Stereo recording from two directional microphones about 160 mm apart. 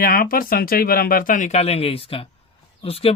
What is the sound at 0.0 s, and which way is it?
Speech, 65° left (ahead or behind).